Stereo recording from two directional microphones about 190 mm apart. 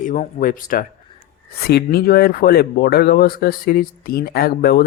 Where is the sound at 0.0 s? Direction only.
45° left (ahead or behind).